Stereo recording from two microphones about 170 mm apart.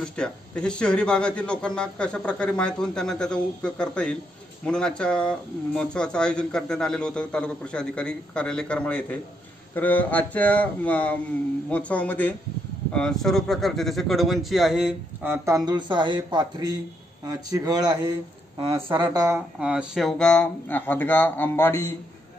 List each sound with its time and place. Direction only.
0.0 s speech: 5° left (ahead or behind); by 19.4 s 20° right (ahead or behind)
19.6 s speech: 5° right (ahead or behind); by 21.9 s 15° left (ahead or behind)